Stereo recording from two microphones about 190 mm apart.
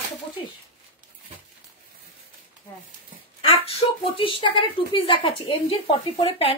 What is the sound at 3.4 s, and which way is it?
A woman's voice, 30° left (ahead or behind).